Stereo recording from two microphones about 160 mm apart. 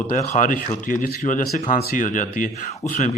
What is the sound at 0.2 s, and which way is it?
Speech, 55° left (ahead or behind).